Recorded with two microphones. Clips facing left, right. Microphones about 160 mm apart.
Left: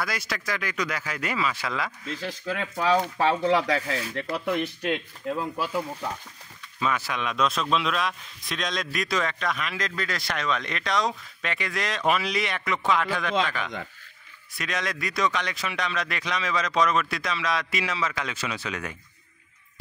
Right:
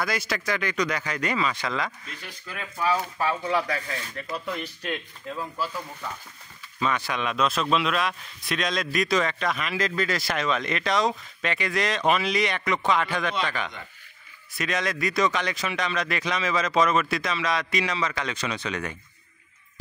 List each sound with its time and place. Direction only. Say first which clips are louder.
0.0 s a man's voice: right 3 dB; centre (ahead or behind)
2.0 s speech: left 10 dB; 90° left; by 4.6 s 70° left (ahead or behind)
6.8 s a man's voice: right 1 dB; 5° left (ahead or behind)
14.5 s a man's voice: right 3 dB; centre (ahead or behind)